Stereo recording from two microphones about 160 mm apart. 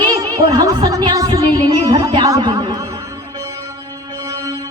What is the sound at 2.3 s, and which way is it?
Speech, 25° right (ahead or behind).